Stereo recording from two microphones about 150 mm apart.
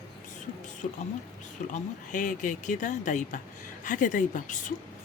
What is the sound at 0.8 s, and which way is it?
Speech, 65° left (ahead or behind).